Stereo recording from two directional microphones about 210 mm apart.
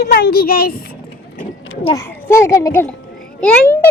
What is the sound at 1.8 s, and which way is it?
A child's voice, 20° left (ahead or behind).